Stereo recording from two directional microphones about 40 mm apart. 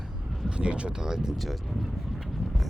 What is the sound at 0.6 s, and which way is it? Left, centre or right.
Speech, right.